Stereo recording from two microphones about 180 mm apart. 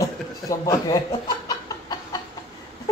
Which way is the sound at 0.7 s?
20° left (ahead or behind).